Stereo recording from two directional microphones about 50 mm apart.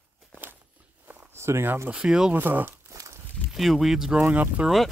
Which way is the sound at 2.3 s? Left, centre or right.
Right.